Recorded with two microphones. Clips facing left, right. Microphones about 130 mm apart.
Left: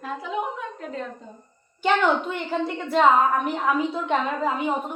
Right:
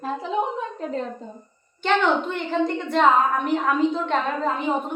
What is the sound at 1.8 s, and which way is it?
A woman's voice, 10° left (ahead or behind).